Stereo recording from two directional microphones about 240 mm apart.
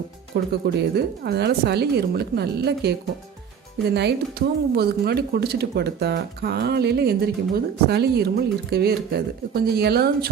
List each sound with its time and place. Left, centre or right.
0.3 s speech: right
3.9 s speech: right